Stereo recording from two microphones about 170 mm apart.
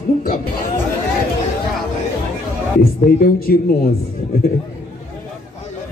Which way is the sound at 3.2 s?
60° left (ahead or behind).